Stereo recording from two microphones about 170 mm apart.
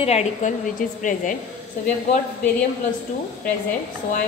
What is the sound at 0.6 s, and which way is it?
Speech, 50° left (ahead or behind).